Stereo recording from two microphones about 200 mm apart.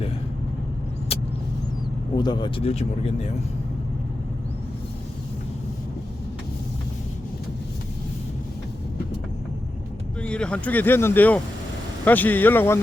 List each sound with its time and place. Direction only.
1.1 s vehicle: 30° left (ahead or behind)
2.1 s speech: 20° left (ahead or behind)
10.2 s speech: 5° left (ahead or behind)